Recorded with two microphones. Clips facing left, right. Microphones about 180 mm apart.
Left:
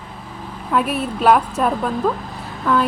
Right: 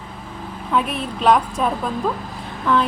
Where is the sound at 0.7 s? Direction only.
5° left (ahead or behind).